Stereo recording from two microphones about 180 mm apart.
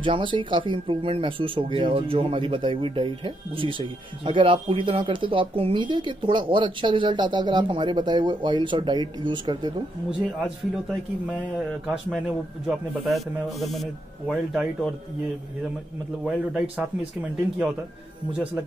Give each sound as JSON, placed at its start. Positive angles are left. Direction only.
{"t": 0.0, "sound": "speech", "side_deg": -30}
{"t": 10.4, "sound": "speech", "side_deg": -5}
{"t": 16.3, "sound": "speech", "side_deg": -5}